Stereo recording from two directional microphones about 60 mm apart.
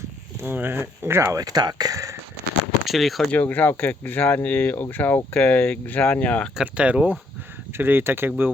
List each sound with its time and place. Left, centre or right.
0.3 s speech: right
1.3 s speech: right
2.8 s speech: centre
3.3 s speech: left
6.6 s speech: centre
7.7 s speech: right